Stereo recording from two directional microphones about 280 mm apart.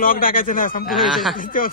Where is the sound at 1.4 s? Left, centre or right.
Left.